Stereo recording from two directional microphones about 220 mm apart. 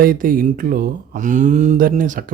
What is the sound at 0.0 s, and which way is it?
Speech, 40° right (ahead or behind).